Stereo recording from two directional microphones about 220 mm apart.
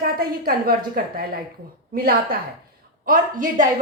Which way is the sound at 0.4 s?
45° right (ahead or behind).